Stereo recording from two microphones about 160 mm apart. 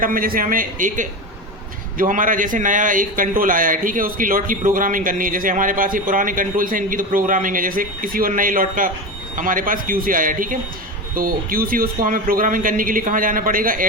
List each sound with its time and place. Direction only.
0.0 s a man's voice: 60° right (ahead or behind)